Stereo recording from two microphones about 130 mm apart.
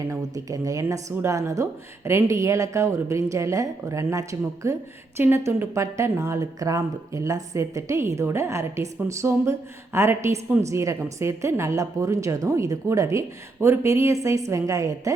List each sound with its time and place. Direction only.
0.1 s speech: 25° right (ahead or behind)